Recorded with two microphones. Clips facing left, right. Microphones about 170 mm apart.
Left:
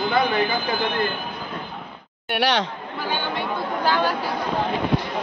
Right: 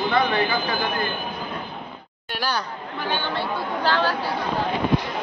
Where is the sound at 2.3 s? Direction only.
80° left.